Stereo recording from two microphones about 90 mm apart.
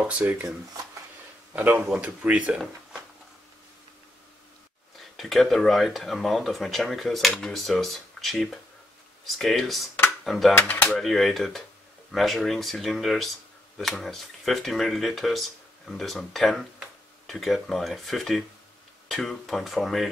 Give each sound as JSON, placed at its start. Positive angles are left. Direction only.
{"t": 0.2, "sound": "speech", "side_deg": -20}
{"t": 1.5, "sound": "speech", "side_deg": -20}
{"t": 5.1, "sound": "speech", "side_deg": 0}
{"t": 10.6, "sound": "speech", "side_deg": 15}
{"t": 11.0, "sound": "speech", "side_deg": 0}